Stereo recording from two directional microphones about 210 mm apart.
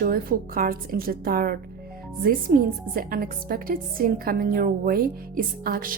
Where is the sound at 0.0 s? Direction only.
45° right (ahead or behind).